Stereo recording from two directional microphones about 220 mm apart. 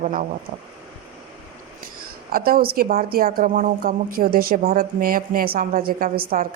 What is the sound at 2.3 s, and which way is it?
A woman's voice, 40° right (ahead or behind).